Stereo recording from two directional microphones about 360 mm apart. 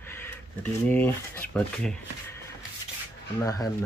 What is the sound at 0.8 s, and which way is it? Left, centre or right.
Speech, centre.